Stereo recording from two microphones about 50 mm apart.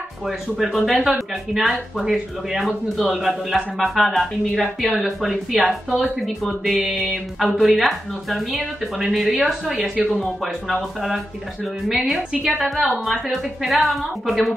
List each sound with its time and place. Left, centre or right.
0.2 s speech: centre
12.2 s a woman's voice: centre
12.8 s speech: centre